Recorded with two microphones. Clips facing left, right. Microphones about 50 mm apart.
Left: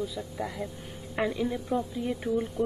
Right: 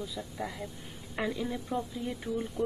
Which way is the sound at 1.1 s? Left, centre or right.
Centre.